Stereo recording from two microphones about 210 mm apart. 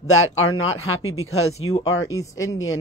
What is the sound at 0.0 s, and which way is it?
Speech, 80° left.